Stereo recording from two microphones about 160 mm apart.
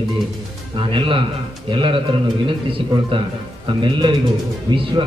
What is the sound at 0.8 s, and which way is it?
A man's voice, 35° right (ahead or behind).